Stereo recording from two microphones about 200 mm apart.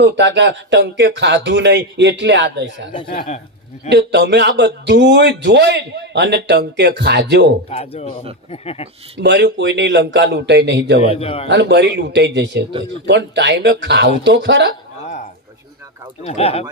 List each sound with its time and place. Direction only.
0.0 s a man's voice: 60° right (ahead or behind)
3.9 s a man's voice: 60° right (ahead or behind)
7.7 s speech: 30° left (ahead or behind)
9.1 s a man's voice: 60° right (ahead or behind)
11.0 s speech: 30° left (ahead or behind)
11.4 s a man's voice: 60° right (ahead or behind)
16.2 s speech: 30° left (ahead or behind)